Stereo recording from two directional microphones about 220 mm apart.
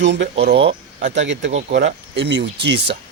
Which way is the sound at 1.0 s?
55° right (ahead or behind).